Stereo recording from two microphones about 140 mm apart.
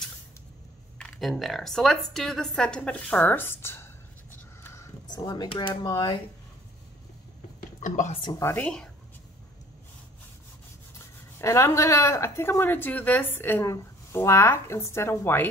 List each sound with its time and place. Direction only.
0.9 s speech: 5° left (ahead or behind)
5.1 s speech: 30° left (ahead or behind)
7.8 s a woman's voice: 65° left (ahead or behind)
8.2 s speech: 25° left (ahead or behind); by 8.9 s 5° left (ahead or behind)
11.3 s speech: 20° left (ahead or behind)